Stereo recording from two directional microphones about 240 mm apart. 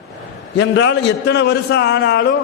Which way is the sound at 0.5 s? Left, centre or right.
Left.